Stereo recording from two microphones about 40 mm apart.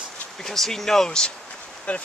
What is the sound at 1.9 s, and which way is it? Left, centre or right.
Speech, left.